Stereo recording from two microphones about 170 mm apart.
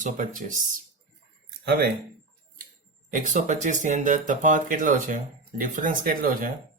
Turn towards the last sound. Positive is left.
turn(degrees=-55)  # may be behind; listen again after turning